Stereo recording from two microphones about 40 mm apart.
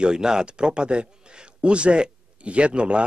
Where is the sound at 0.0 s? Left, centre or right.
Centre.